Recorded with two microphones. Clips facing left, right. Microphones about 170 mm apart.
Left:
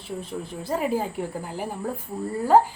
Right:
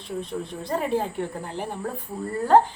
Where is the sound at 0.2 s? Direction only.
5° left (ahead or behind).